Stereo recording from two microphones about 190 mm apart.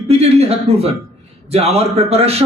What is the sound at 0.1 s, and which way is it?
A man's voice, 35° right (ahead or behind).